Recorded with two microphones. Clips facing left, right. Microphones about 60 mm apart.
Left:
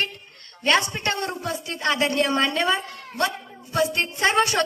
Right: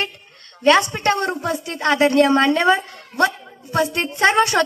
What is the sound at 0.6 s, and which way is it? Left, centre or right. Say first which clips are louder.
A woman's voice: right 6 dB; right.